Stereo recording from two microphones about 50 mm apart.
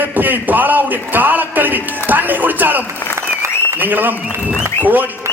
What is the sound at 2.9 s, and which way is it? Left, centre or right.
Speech, left.